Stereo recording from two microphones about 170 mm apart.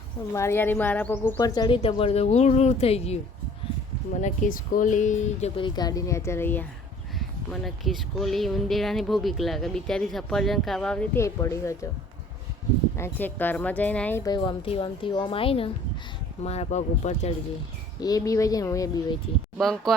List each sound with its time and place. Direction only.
0.3 s speech: 15° left (ahead or behind); by 3.2 s 35° left (ahead or behind)
4.2 s speech: 50° left (ahead or behind)
5.5 s speech: 25° left (ahead or behind)
7.2 s speech: centre (ahead or behind)
11.2 s speech: 15° left (ahead or behind)
13.0 s speech: 10° left (ahead or behind)
14.3 s a woman's voice: 30° left (ahead or behind)
18.0 s speech: 20° left (ahead or behind)
19.5 s speech: centre (ahead or behind)